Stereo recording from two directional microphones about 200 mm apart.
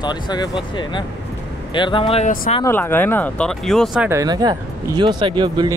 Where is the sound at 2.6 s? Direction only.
10° left (ahead or behind).